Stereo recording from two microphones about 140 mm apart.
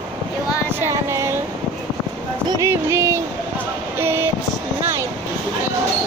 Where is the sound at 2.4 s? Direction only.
30° right (ahead or behind).